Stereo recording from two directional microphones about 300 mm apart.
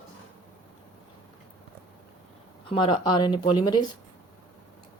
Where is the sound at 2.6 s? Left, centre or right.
Centre.